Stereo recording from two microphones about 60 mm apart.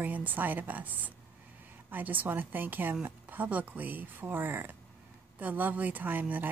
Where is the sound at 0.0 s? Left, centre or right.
Right.